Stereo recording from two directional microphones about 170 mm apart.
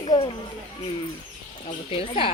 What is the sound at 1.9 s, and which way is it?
Speech, 35° left (ahead or behind).